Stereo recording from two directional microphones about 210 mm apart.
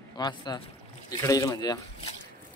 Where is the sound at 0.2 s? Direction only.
20° left (ahead or behind).